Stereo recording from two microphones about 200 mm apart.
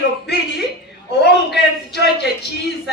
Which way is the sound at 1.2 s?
55° left (ahead or behind).